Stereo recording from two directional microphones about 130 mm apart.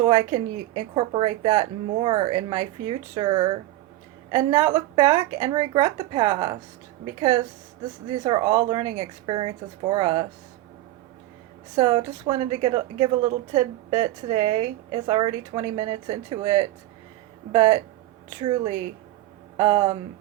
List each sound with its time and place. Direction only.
0.0 s a woman's voice: 45° right (ahead or behind)
4.4 s a woman's voice: 50° right (ahead or behind)
8.1 s speech: 40° right (ahead or behind)
11.8 s a woman's voice: 40° right (ahead or behind)
18.3 s a woman's voice: 40° right (ahead or behind)